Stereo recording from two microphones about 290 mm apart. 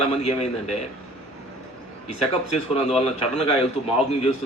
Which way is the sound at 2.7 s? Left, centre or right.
Left.